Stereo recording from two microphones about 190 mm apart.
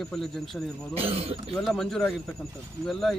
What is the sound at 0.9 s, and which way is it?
Speech, 30° right (ahead or behind).